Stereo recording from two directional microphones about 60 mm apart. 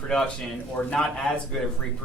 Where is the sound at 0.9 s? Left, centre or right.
Centre.